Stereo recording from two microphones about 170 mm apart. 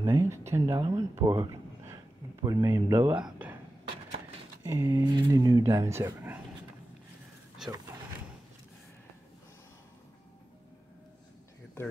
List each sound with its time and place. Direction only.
0.0 s a sound: 15° right (ahead or behind)
0.5 s speech: 15° right (ahead or behind)
4.6 s speech: 15° right (ahead or behind)
7.6 s speech: 5° right (ahead or behind)
11.8 s speech: 15° left (ahead or behind)